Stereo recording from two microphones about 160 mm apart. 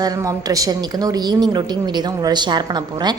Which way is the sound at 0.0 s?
20° right (ahead or behind).